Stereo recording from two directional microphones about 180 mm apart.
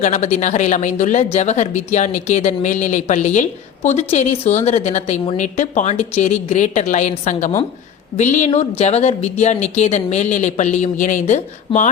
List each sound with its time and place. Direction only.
0.0 s a woman's voice: 40° left (ahead or behind)